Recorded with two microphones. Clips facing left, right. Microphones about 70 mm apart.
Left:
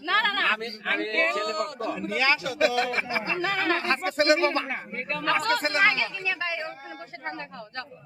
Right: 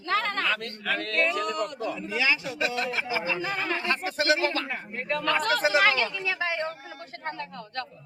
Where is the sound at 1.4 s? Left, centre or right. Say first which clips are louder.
Left 1 dB; left.